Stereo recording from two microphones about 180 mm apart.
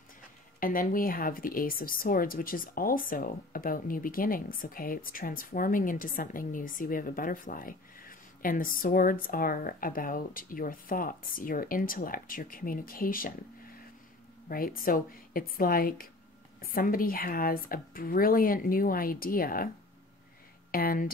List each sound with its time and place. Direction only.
0.6 s speech: 50° left (ahead or behind)
14.5 s speech: 55° left (ahead or behind)
20.7 s speech: 55° left (ahead or behind)